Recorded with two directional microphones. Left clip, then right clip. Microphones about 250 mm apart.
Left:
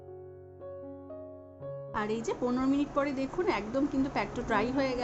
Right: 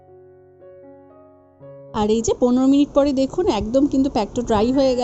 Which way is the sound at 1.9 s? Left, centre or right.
Right.